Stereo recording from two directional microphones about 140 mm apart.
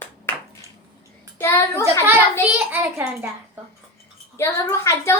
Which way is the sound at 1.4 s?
15° left (ahead or behind).